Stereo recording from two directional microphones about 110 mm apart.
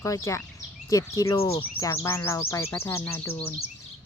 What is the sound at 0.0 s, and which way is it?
Bird, 30° left (ahead or behind).